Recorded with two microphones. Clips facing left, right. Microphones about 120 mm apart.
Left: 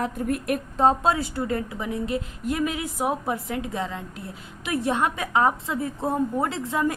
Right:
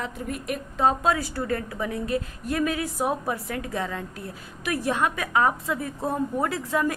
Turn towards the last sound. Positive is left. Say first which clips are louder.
# even
turn(degrees=20)  # may be behind; listen again after turning